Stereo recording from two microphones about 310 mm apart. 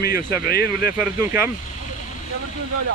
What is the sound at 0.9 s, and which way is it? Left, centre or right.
Speech, centre.